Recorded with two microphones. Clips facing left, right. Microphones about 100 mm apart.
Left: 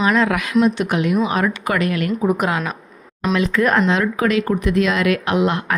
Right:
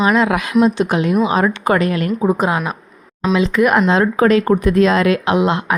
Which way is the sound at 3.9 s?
35° right (ahead or behind).